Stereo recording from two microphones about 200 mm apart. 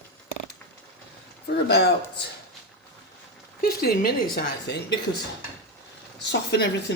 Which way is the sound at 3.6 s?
50° left (ahead or behind).